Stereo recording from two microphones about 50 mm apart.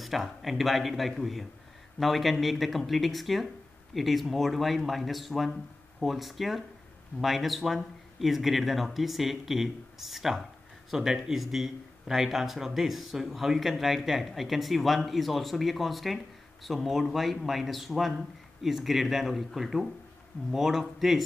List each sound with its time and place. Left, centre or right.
0.0 s speech: centre